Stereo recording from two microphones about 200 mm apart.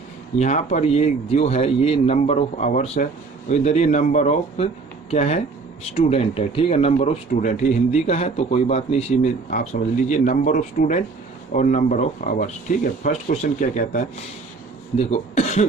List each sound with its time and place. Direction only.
0.3 s speech: 35° left (ahead or behind)